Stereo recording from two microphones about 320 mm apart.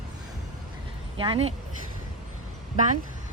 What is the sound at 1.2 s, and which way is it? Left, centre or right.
Speech, centre.